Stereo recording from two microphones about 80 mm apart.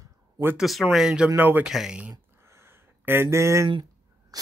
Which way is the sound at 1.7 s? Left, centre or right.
Centre.